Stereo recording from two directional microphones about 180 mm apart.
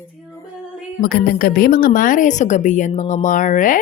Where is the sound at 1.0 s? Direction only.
55° left (ahead or behind).